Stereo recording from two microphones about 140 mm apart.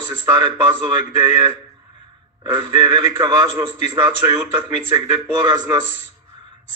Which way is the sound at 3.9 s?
30° right (ahead or behind).